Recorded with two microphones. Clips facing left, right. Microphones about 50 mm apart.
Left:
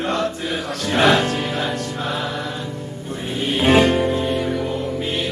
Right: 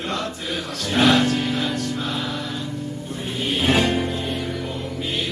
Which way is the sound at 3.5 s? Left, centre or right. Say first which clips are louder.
Left 5 dB; left.